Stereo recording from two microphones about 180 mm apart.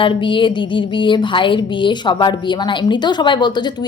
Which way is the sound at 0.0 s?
30° left (ahead or behind).